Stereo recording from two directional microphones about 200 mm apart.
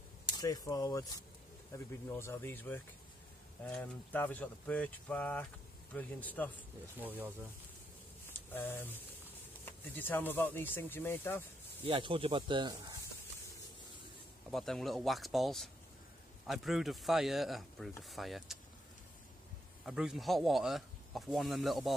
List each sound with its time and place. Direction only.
0.3 s speech: 20° left (ahead or behind)
7.0 s speech: 10° right (ahead or behind)
8.3 s speech: 10° left (ahead or behind)
11.8 s speech: 25° right (ahead or behind)
14.5 s speech: centre (ahead or behind)
19.8 s speech: centre (ahead or behind)